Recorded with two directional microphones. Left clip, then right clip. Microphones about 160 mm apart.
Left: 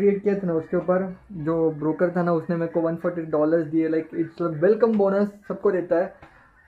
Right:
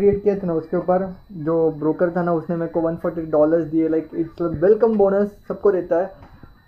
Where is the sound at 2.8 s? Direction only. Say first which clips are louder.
Right 2 dB; 15° left (ahead or behind).